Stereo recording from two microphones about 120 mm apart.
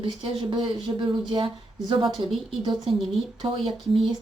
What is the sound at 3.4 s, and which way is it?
Speech, 45° right (ahead or behind).